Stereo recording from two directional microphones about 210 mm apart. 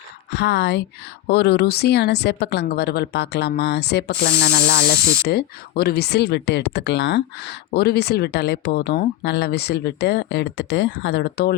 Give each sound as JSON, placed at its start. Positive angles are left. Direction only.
{"t": 0.3, "sound": "a woman's voice", "side_deg": 55}